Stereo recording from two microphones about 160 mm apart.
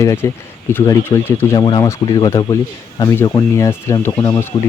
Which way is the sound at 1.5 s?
30° left (ahead or behind).